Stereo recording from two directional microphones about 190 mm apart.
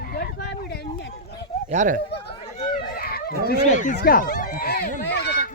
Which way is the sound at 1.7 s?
40° right (ahead or behind).